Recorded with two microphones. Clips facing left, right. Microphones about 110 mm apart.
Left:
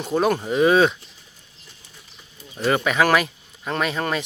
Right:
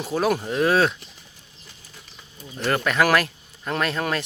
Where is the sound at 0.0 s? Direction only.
5° right (ahead or behind).